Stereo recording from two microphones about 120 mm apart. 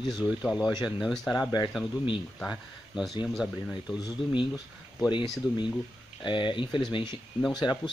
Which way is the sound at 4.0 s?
35° left (ahead or behind).